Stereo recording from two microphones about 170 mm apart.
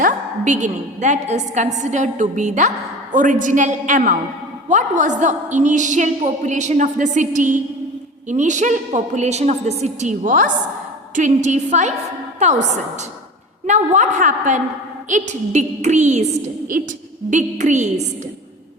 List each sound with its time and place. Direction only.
0.0 s a woman's voice: 45° right (ahead or behind)